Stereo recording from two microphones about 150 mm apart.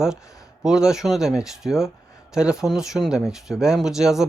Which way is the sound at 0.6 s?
5° right (ahead or behind).